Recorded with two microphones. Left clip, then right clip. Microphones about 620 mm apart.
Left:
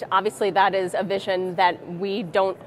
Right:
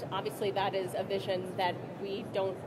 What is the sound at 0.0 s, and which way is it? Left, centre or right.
A woman's voice, left.